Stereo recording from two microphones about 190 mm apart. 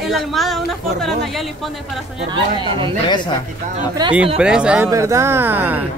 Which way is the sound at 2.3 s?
25° right (ahead or behind).